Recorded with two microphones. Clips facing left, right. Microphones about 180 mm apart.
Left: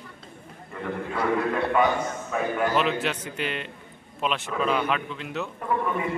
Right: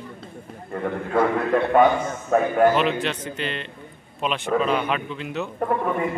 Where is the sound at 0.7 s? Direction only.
50° right (ahead or behind).